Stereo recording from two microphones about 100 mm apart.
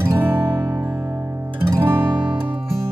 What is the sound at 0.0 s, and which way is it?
Music, 25° right (ahead or behind).